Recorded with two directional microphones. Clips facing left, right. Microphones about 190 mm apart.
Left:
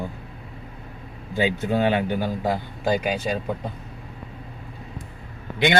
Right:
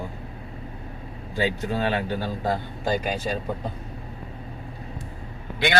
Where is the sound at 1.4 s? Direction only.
20° left (ahead or behind).